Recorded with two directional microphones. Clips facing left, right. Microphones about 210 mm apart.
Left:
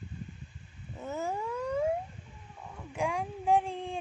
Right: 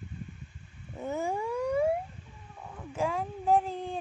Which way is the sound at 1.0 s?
15° right (ahead or behind).